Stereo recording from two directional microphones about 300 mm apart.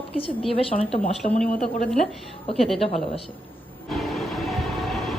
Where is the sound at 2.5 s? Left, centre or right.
Centre.